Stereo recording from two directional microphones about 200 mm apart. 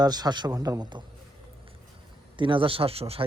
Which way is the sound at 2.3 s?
25° right (ahead or behind).